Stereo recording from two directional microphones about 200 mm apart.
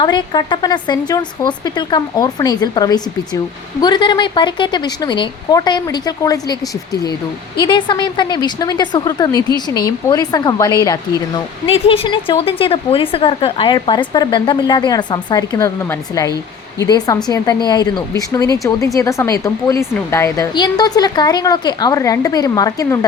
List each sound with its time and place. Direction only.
0.0 s a woman's voice: 20° left (ahead or behind)
7.6 s a woman's voice: 25° left (ahead or behind)